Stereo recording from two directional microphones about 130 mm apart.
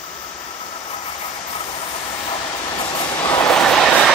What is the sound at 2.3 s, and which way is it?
Train, 40° left (ahead or behind).